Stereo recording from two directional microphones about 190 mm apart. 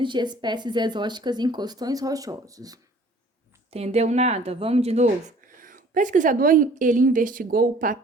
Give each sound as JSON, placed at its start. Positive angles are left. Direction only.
{"t": 0.0, "sound": "speech", "side_deg": -25}
{"t": 3.7, "sound": "a woman's voice", "side_deg": -35}